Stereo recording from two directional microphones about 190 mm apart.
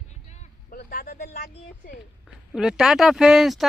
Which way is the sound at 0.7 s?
55° left (ahead or behind).